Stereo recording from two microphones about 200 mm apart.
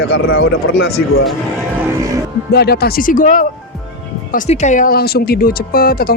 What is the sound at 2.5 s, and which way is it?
Speech, 55° left (ahead or behind).